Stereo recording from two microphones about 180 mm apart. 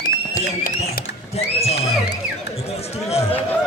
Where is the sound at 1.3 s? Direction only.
35° left (ahead or behind).